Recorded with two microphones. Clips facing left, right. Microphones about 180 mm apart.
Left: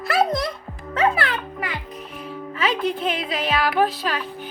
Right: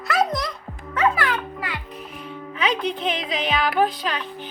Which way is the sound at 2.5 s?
5° left (ahead or behind).